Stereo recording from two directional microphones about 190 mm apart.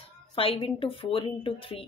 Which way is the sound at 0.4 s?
30° left (ahead or behind).